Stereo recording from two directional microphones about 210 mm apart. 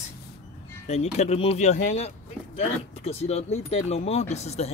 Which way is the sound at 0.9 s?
30° left (ahead or behind).